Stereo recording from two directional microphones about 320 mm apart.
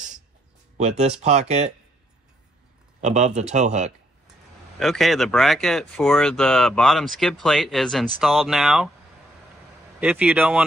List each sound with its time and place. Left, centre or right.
0.7 s speech: right
3.0 s speech: right
4.7 s speech: centre
9.9 s speech: centre